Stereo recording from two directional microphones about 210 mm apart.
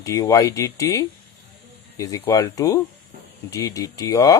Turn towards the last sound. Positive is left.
turn(degrees=15)  # may be behind; listen again after turning